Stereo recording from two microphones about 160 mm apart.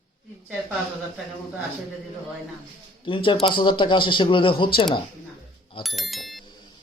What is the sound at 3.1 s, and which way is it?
Speech, 35° left (ahead or behind).